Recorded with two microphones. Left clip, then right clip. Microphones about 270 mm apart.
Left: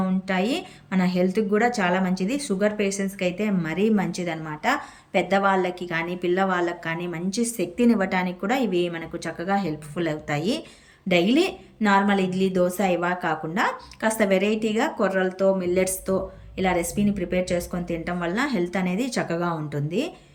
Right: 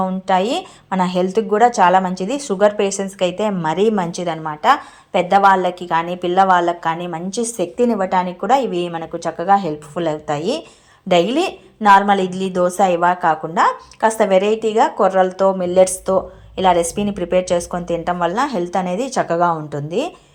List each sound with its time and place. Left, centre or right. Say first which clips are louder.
0.0 s a woman's voice: right 9 dB; centre